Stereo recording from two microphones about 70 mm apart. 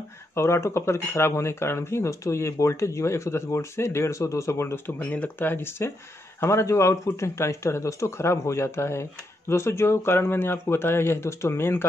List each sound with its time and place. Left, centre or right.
0.3 s speech: left